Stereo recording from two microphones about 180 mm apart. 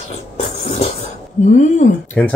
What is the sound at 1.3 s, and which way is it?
Speech, 40° left (ahead or behind).